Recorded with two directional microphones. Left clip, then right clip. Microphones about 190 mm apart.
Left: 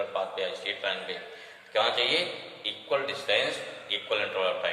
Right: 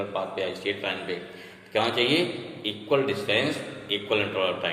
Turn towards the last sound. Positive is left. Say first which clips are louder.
# right 2 dB
turn(degrees=-20)  # may be behind; listen again after turning